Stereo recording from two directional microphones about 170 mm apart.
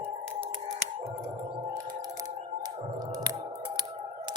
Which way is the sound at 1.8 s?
20° right (ahead or behind).